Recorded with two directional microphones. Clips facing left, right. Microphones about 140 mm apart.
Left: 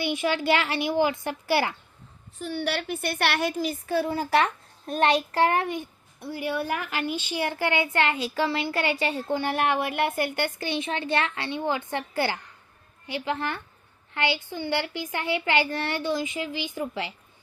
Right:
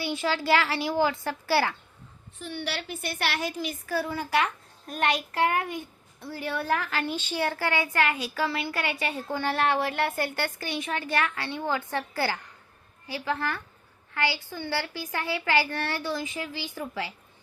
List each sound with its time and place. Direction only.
0.0 s a woman's voice: 15° left (ahead or behind)
2.4 s a woman's voice: 45° left (ahead or behind); by 3.5 s 65° left (ahead or behind)
3.8 s a woman's voice: 25° left (ahead or behind)
6.1 s a woman's voice: 15° left (ahead or behind)